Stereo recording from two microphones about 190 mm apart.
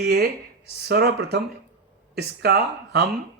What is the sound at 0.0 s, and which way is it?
Speech, 55° right (ahead or behind).